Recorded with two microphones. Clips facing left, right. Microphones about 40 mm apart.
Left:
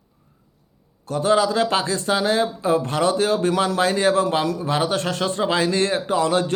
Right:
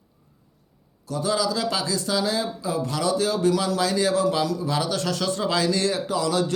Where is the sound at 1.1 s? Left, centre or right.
Left.